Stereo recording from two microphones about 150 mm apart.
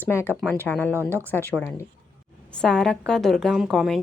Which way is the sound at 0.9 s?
15° right (ahead or behind).